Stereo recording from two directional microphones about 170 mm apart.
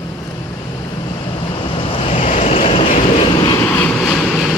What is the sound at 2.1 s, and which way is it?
Waves, 45° left (ahead or behind).